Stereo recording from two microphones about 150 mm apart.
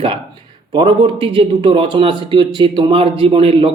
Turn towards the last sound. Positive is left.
turn(degrees=-40)  # may be behind; listen again after turning